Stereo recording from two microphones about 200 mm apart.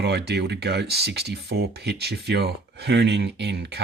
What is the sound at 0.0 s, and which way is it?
Speech, 55° right (ahead or behind).